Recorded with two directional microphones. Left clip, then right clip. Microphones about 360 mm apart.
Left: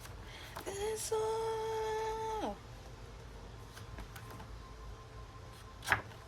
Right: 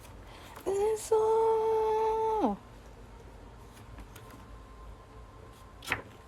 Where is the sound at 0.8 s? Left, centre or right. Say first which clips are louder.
Right 9 dB; centre.